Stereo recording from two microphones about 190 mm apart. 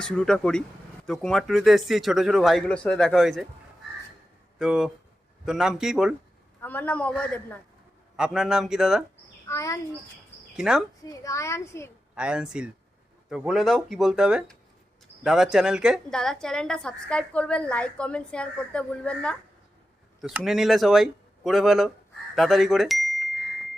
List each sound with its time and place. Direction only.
0.0 s a woman's voice: 5° left (ahead or behind)
4.5 s a woman's voice: 5° right (ahead or behind)
6.6 s a child's voice: 10° left (ahead or behind)
9.5 s a child's voice: 15° left (ahead or behind)
10.6 s a woman's voice: 5° right (ahead or behind)
11.0 s a child's voice: 15° left (ahead or behind)
12.1 s a woman's voice: 5° right (ahead or behind)